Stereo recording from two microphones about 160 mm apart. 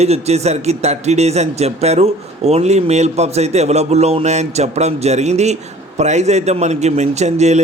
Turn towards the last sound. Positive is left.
turn(degrees=-45)  # may be behind; listen again after turning